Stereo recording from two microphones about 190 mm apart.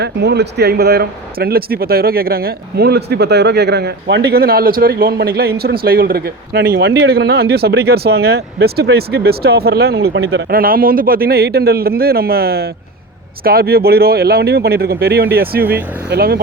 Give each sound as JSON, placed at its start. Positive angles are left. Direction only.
{"t": 0.0, "sound": "speech", "side_deg": -60}